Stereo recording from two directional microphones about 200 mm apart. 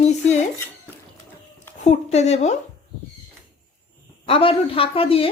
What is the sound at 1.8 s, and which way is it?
Speech, 35° left (ahead or behind).